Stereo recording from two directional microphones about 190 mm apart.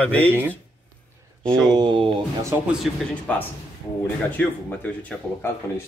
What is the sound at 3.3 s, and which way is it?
Speech, 5° left (ahead or behind).